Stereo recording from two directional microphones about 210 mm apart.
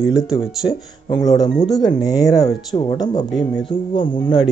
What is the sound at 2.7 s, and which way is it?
Speech, 25° left (ahead or behind).